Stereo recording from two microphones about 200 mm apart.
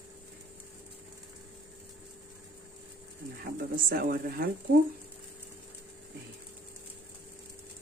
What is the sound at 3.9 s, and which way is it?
Speech, 45° right (ahead or behind).